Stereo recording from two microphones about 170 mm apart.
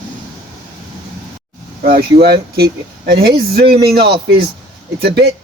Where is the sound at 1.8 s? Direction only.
60° right (ahead or behind).